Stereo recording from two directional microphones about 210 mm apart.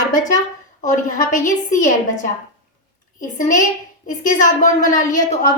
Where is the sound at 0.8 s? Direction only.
40° left (ahead or behind).